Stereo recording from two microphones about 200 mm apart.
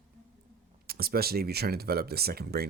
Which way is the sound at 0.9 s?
50° right (ahead or behind).